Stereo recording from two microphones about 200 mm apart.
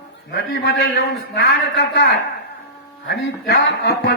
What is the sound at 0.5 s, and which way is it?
A man's voice, 50° left (ahead or behind).